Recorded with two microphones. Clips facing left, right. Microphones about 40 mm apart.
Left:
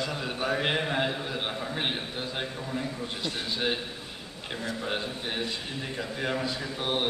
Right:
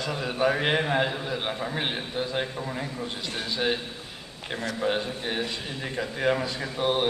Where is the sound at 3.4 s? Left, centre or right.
Centre.